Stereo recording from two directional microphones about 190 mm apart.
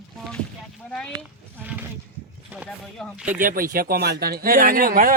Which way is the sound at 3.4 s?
50° right (ahead or behind).